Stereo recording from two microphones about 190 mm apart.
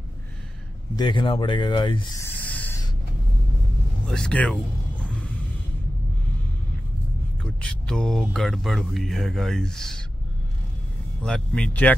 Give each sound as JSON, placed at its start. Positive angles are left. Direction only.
{"t": 0.9, "sound": "speech", "side_deg": 25}
{"t": 2.2, "sound": "a sound", "side_deg": 10}
{"t": 4.1, "sound": "speech", "side_deg": 5}
{"t": 7.6, "sound": "speech", "side_deg": 5}
{"t": 11.2, "sound": "speech", "side_deg": 5}